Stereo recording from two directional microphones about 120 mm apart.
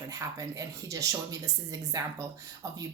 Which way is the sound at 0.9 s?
30° right (ahead or behind).